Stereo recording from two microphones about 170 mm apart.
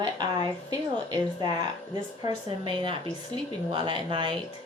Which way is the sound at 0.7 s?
20° right (ahead or behind).